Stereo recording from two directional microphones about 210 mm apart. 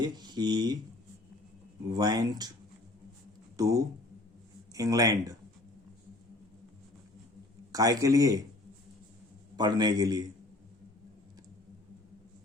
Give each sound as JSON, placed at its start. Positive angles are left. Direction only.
{"t": 0.0, "sound": "speech", "side_deg": -20}
{"t": 1.9, "sound": "a man's voice", "side_deg": -20}
{"t": 3.6, "sound": "a man's voice", "side_deg": -15}
{"t": 7.7, "sound": "a man's voice", "side_deg": -15}
{"t": 9.6, "sound": "a man's voice", "side_deg": -20}